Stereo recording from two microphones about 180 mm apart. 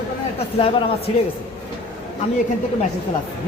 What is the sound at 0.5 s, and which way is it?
Speech, 30° left (ahead or behind).